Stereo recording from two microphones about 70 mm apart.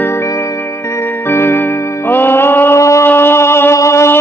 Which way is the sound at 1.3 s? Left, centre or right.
Left.